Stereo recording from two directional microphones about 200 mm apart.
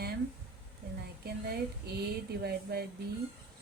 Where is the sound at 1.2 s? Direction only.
55° right (ahead or behind).